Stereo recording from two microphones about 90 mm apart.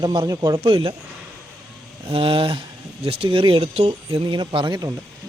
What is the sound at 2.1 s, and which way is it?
Speech, 85° right.